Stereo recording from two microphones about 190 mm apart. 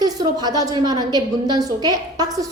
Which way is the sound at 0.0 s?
20° right (ahead or behind).